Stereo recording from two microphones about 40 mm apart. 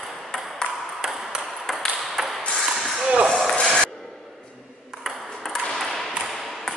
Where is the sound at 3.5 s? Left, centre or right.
Centre.